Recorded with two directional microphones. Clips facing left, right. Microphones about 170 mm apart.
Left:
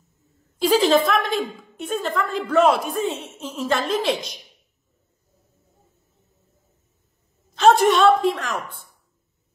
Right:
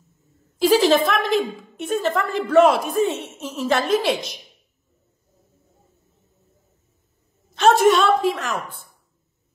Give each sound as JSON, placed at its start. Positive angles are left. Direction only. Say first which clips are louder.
{"t": 0.6, "sound": "a woman's voice", "louder": "right 1 dB", "side_deg": 0}
{"t": 7.5, "sound": "a woman's voice", "louder": "even", "side_deg": 0}